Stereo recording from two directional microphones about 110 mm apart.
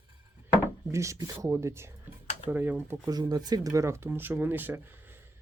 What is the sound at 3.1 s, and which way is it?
Speech, 35° right (ahead or behind).